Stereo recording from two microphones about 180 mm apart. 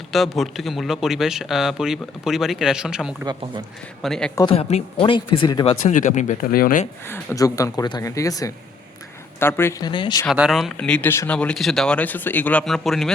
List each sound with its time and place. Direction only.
0.1 s speech: centre (ahead or behind)
4.5 s speech: 30° left (ahead or behind)
5.8 s speech: 45° left (ahead or behind)
7.1 s speech: 15° left (ahead or behind)
9.9 s speech: 25° left (ahead or behind)
10.3 s speech: centre (ahead or behind)